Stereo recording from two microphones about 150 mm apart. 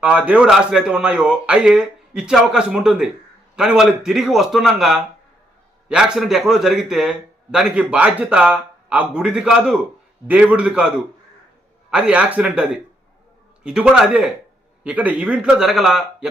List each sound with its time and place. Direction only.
0.0 s a man's voice: 10° right (ahead or behind)